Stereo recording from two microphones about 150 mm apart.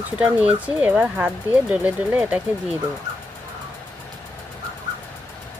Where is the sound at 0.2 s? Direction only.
10° right (ahead or behind).